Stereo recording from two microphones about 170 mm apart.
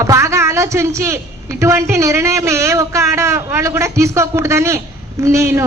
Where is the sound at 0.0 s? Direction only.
15° right (ahead or behind).